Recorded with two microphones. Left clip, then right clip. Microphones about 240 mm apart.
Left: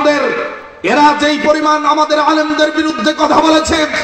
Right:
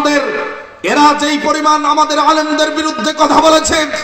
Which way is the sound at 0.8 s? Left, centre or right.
Right.